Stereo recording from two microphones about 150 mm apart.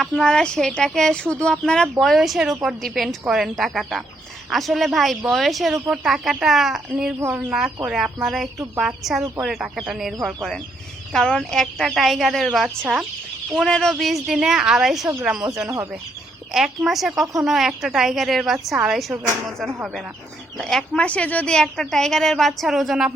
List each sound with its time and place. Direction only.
0.0 s speech: 5° left (ahead or behind)
7.2 s speech: 15° right (ahead or behind)
7.9 s speech: 5° right (ahead or behind)
13.5 s speech: centre (ahead or behind)
16.5 s speech: 5° right (ahead or behind)
20.6 s speech: 5° left (ahead or behind)